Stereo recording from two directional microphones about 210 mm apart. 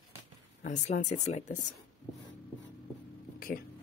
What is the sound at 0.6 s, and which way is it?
Speech, 35° left (ahead or behind).